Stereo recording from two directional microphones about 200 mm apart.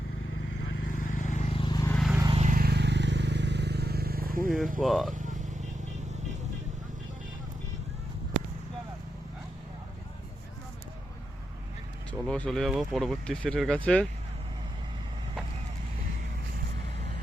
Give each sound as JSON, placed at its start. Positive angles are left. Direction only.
{"t": 0.9, "sound": "vehicle", "side_deg": 40}
{"t": 1.9, "sound": "vehicle", "side_deg": 0}
{"t": 2.3, "sound": "vehicle", "side_deg": -35}
{"t": 4.8, "sound": "speech", "side_deg": 0}
{"t": 5.1, "sound": "vehicle", "side_deg": -40}
{"t": 12.3, "sound": "speech", "side_deg": 5}